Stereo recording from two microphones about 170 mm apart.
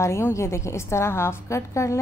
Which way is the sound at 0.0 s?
15° left (ahead or behind).